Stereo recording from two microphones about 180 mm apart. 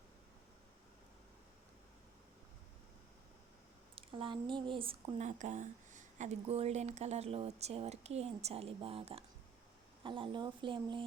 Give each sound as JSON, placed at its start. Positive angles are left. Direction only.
{"t": 3.9, "sound": "a woman's voice", "side_deg": -30}